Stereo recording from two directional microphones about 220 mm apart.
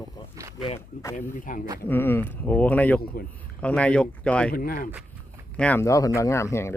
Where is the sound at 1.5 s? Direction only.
40° left (ahead or behind).